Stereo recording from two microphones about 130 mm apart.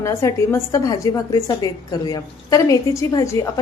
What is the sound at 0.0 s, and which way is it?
A woman's voice, 25° left (ahead or behind).